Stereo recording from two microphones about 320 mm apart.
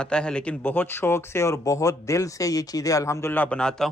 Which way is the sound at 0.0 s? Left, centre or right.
Centre.